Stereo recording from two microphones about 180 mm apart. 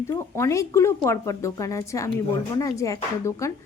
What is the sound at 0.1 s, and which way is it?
A woman's voice, 15° left (ahead or behind).